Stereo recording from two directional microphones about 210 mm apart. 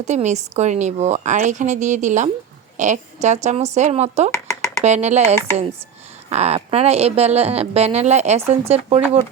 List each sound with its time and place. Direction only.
0.0 s a woman's voice: 35° right (ahead or behind)